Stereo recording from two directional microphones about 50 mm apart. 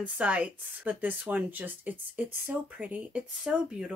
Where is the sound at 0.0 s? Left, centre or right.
Right.